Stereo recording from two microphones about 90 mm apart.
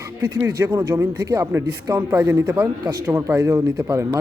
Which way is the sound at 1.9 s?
20° right (ahead or behind).